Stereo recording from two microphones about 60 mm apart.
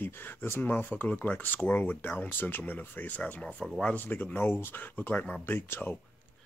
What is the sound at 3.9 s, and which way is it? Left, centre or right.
Speech, left.